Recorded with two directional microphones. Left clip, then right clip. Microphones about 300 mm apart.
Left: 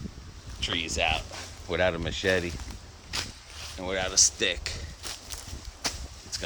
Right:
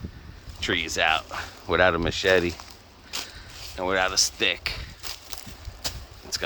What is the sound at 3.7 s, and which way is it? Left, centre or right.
Speech, centre.